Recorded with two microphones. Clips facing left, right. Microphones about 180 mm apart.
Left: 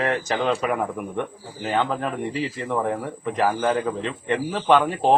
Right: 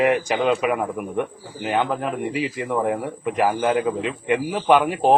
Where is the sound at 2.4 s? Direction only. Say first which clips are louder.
Right 3 dB; 10° right (ahead or behind).